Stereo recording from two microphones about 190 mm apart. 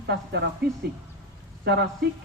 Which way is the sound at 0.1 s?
60° right (ahead or behind).